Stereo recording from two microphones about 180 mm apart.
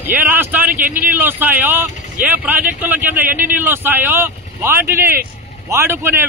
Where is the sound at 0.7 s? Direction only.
50° right (ahead or behind).